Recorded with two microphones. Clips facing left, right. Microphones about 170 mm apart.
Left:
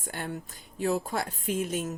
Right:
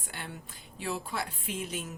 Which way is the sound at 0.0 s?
45° left (ahead or behind).